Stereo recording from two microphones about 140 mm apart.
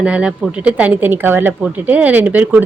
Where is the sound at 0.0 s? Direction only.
10° right (ahead or behind).